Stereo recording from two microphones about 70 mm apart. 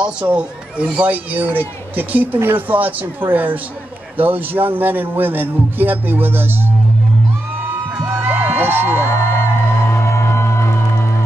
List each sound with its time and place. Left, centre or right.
0.2 s speech: centre
7.9 s music: right
9.1 s speech: left
9.9 s music: left